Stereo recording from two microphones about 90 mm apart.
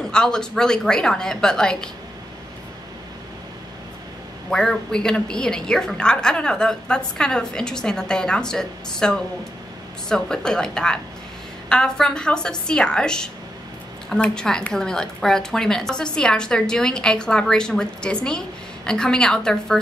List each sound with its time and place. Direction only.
0.0 s a woman's voice: 5° left (ahead or behind)
4.5 s a woman's voice: 5° left (ahead or behind)